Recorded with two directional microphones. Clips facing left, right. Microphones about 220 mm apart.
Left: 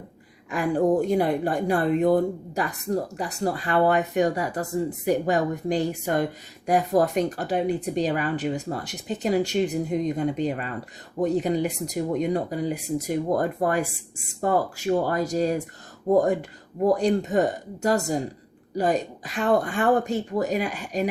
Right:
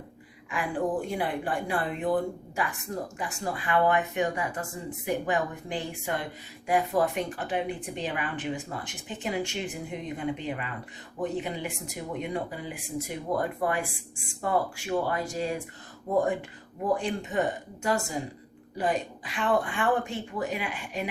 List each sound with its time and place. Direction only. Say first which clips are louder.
0.5 s a woman's voice: left 8 dB; 40° left (ahead or behind)